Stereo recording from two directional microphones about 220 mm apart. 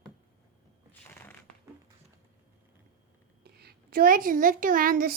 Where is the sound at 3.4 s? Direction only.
45° right (ahead or behind).